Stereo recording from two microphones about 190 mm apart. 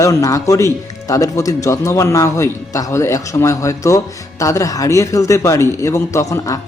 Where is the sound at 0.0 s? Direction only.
15° left (ahead or behind).